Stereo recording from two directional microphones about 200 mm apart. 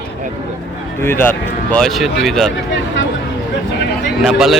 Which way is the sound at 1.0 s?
10° left (ahead or behind).